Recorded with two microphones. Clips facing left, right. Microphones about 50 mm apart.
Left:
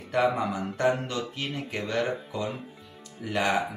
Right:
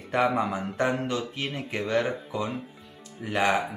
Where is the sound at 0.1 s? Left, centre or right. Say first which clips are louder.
Right 1 dB; centre.